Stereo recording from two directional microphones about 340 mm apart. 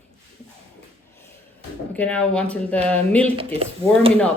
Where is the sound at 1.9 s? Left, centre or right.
Centre.